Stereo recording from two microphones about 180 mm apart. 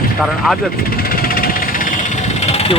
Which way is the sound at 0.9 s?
55° left (ahead or behind).